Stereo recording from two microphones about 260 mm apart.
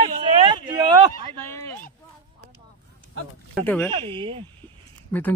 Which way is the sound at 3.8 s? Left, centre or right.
Centre.